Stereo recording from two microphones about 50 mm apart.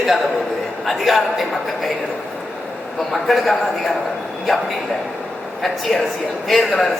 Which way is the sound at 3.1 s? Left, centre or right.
Centre.